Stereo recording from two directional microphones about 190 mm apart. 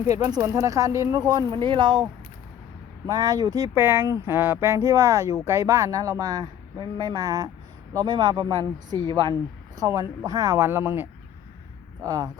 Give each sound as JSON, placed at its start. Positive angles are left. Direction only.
{"t": 0.0, "sound": "speech", "side_deg": -20}
{"t": 3.1, "sound": "speech", "side_deg": -20}